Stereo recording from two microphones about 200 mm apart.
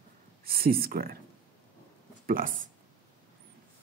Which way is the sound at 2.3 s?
45° right (ahead or behind).